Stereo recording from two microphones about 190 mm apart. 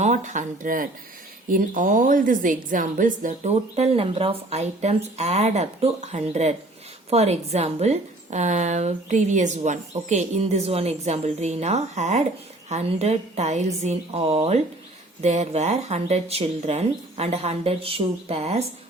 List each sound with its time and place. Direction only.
0.0 s a woman's voice: 40° right (ahead or behind)